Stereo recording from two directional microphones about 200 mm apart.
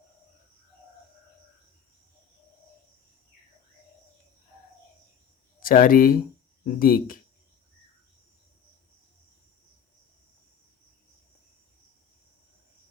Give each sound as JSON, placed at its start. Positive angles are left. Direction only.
{"t": 5.6, "sound": "speech", "side_deg": 45}